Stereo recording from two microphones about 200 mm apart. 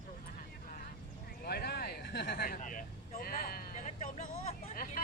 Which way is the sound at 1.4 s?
50° left (ahead or behind).